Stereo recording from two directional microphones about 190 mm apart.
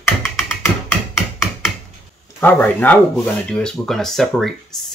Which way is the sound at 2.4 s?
10° left (ahead or behind).